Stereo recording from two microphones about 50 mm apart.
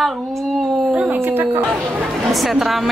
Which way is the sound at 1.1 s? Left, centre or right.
Right.